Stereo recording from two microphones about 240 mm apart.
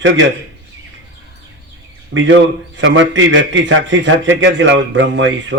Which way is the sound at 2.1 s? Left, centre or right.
Right.